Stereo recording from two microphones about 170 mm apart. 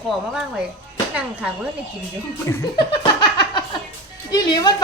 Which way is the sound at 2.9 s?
25° left (ahead or behind).